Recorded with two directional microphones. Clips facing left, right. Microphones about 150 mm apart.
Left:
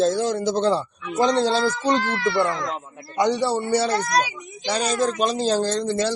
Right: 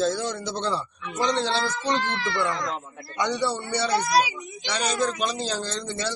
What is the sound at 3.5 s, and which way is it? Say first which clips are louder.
Child singing: left 7 dB; 40° left (ahead or behind).